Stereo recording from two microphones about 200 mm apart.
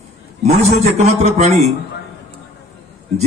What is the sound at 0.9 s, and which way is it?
Speech, 35° right (ahead or behind).